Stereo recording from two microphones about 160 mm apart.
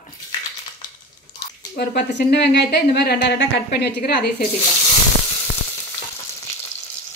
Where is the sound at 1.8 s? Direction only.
90° left.